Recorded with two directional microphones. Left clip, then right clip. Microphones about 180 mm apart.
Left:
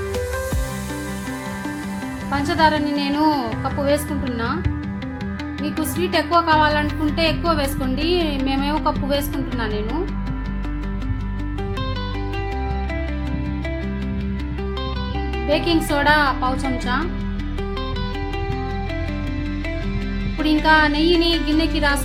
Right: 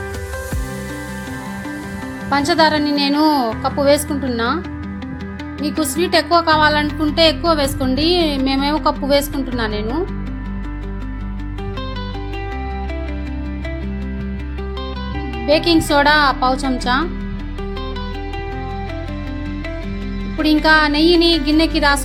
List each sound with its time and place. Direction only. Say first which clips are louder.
2.3 s speech: right 4 dB; 40° right (ahead or behind)
5.6 s speech: right 5 dB; 40° right (ahead or behind)
15.4 s speech: right 5 dB; 40° right (ahead or behind)
20.4 s speech: right 3 dB; 40° right (ahead or behind)